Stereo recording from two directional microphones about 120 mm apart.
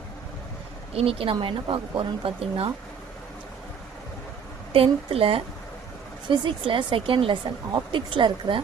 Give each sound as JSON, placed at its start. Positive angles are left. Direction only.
{"t": 0.9, "sound": "speech", "side_deg": -50}
{"t": 4.7, "sound": "speech", "side_deg": -50}
{"t": 6.2, "sound": "speech", "side_deg": -40}